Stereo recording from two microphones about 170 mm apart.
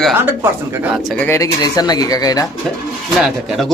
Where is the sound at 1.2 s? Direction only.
15° left (ahead or behind).